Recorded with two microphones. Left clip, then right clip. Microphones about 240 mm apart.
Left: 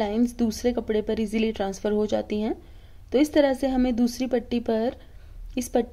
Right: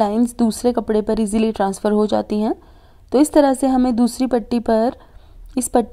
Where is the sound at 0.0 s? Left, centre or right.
Right.